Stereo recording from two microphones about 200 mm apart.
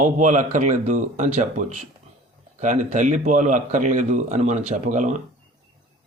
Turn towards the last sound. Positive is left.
turn(degrees=-35)  # may be behind; listen again after turning